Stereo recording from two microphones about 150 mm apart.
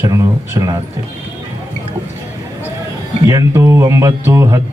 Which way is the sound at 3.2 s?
20° right (ahead or behind).